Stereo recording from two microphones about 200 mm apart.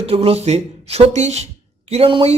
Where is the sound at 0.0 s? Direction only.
30° right (ahead or behind).